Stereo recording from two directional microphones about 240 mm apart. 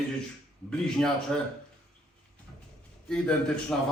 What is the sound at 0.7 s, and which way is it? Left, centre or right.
Speech, centre.